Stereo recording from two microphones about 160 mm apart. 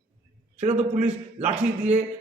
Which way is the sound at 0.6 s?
45° right (ahead or behind).